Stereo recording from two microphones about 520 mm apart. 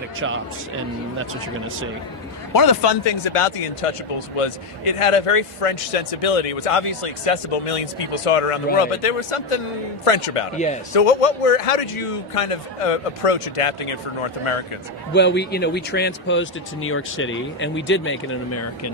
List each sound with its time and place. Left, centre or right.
2.5 s a man's voice: left
15.1 s speech: centre